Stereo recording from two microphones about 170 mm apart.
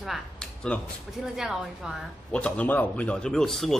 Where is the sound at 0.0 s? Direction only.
Centre (ahead or behind).